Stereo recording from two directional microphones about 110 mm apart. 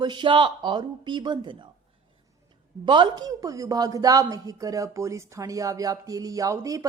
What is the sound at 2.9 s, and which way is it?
Speech, 40° right (ahead or behind).